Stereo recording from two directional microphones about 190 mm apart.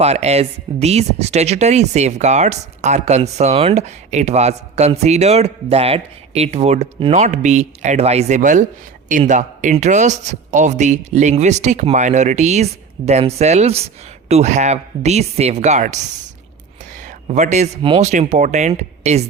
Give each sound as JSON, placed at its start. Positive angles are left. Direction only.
{"t": 0.0, "sound": "speech", "side_deg": -35}
{"t": 17.2, "sound": "a woman's voice", "side_deg": -35}